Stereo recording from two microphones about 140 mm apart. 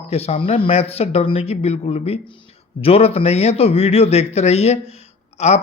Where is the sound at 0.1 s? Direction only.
45° left (ahead or behind).